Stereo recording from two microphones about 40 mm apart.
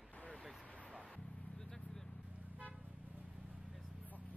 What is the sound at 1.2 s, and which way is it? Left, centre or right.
Vehicle, left.